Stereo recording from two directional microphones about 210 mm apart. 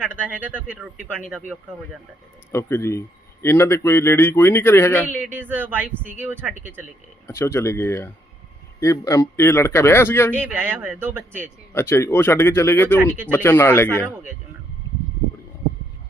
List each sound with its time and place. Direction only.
0.0 s a man's voice: 10° right (ahead or behind)
2.5 s speech: 10° left (ahead or behind)
5.1 s speech: 10° right (ahead or behind)
7.3 s speech: 15° left (ahead or behind)
10.3 s speech: 10° right (ahead or behind)
11.7 s speech: 10° left (ahead or behind)
13.0 s speech: 10° right (ahead or behind)
13.3 s speech: 10° left (ahead or behind)